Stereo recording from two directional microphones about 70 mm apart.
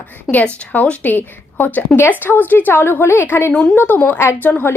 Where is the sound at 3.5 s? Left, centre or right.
Centre.